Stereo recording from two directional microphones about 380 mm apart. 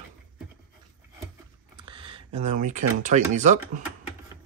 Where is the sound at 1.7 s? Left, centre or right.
Centre.